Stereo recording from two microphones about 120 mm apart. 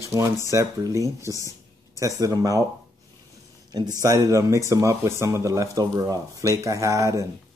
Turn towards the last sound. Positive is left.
turn(degrees=-25)  # may be behind; listen again after turning